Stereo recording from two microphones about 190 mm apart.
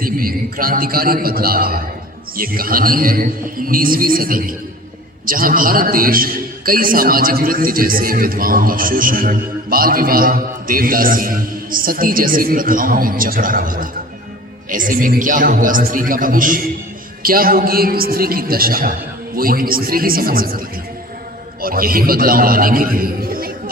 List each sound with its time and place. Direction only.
0.0 s a man's voice: 50° right (ahead or behind)